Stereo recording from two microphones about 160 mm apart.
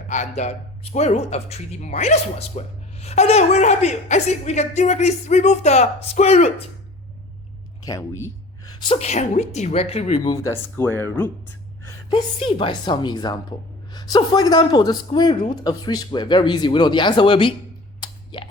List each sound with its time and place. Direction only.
0.1 s a woman's voice: 50° left (ahead or behind)
7.9 s a sound: 20° left (ahead or behind)
9.0 s a woman's voice: 45° left (ahead or behind)
10.2 s speech: 20° left (ahead or behind)
12.1 s speech: 35° left (ahead or behind)
18.0 s a sound: 30° left (ahead or behind)